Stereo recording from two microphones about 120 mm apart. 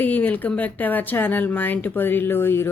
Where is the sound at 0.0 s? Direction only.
15° left (ahead or behind).